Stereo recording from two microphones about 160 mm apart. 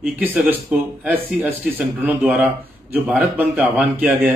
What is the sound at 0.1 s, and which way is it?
Speech, 10° right (ahead or behind).